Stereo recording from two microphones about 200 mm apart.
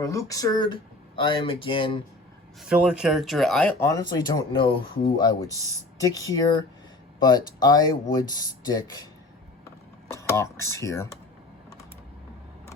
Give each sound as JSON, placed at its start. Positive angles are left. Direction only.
{"t": 0.0, "sound": "speech", "side_deg": 15}
{"t": 2.6, "sound": "speech", "side_deg": -5}
{"t": 10.1, "sound": "speech", "side_deg": 15}